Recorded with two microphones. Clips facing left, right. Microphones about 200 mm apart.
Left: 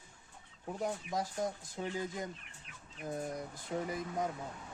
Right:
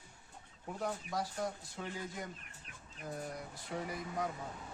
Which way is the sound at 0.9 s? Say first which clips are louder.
Left 1 dB; 20° left (ahead or behind).